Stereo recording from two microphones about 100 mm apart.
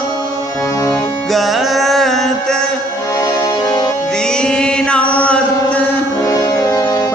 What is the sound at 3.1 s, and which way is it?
Music, 35° left (ahead or behind).